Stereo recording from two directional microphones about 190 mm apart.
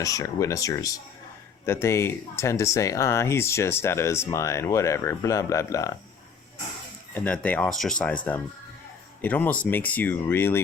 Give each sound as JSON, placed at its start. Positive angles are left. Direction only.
{"t": 0.0, "sound": "speech", "side_deg": 15}
{"t": 7.1, "sound": "speech", "side_deg": 10}